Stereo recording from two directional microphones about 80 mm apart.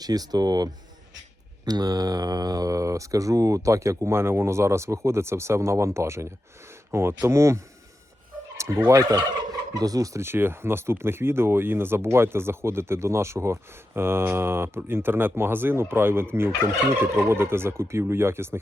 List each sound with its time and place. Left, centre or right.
0.0 s speech: right
1.6 s fowl: right
8.5 s turkey: right
8.9 s fowl: right